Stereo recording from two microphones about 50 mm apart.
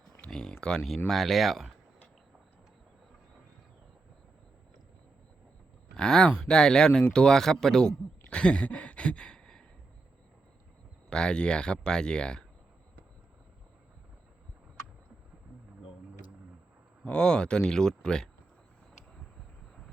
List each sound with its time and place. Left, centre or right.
0.3 s speech: centre
6.0 s speech: centre
11.1 s speech: centre
17.1 s speech: centre